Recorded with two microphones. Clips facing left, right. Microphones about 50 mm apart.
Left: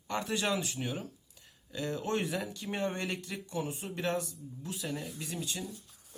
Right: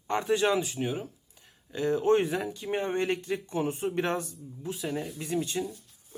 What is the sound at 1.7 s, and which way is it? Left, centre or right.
Speech, right.